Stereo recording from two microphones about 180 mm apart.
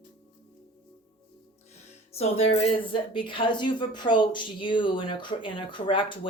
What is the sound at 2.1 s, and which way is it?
Speech, 35° left (ahead or behind).